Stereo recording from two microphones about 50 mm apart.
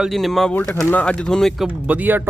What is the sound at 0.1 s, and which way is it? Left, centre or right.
Speech, centre.